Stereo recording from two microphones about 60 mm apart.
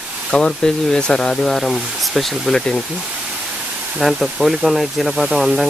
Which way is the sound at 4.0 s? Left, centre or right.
Centre.